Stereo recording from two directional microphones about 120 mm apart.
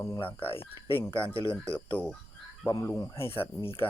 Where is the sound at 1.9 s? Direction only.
15° left (ahead or behind).